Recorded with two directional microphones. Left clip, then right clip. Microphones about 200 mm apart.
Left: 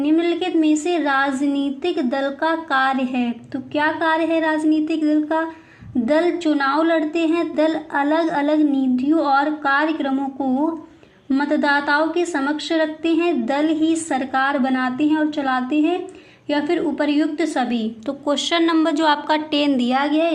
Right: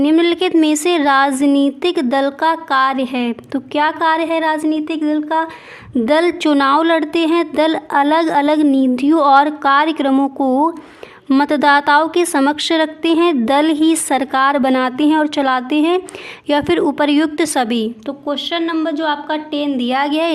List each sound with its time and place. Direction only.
0.0 s a woman's voice: 45° right (ahead or behind); by 5.5 s 20° right (ahead or behind)
6.1 s a woman's voice: 40° right (ahead or behind)
18.3 s a woman's voice: centre (ahead or behind)
19.8 s speech: 20° right (ahead or behind)